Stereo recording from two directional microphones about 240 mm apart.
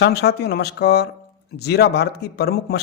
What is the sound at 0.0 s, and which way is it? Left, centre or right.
A man's voice, left.